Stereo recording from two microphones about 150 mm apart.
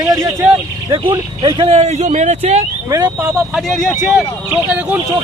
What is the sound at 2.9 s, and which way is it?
Speech, 20° right (ahead or behind).